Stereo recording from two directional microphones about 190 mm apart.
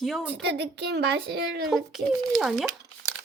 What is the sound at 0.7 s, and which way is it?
Speech, 60° right (ahead or behind).